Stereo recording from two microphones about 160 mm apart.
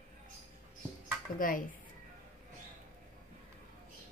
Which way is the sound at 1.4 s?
60° left (ahead or behind).